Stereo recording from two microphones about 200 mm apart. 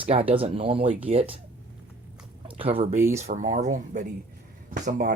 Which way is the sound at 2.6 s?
30° right (ahead or behind).